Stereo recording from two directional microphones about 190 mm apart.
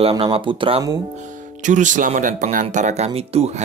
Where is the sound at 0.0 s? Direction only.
30° right (ahead or behind).